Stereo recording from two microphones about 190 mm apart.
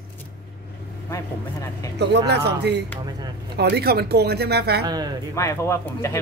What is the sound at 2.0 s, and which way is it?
Speech, 60° right (ahead or behind).